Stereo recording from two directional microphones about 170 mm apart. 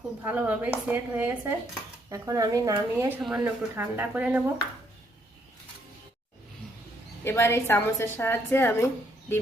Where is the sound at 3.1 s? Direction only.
5° right (ahead or behind).